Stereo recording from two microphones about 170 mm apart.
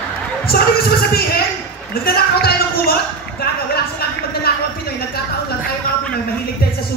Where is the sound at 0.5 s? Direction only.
65° left (ahead or behind).